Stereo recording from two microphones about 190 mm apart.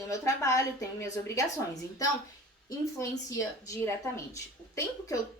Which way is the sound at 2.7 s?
15° left (ahead or behind).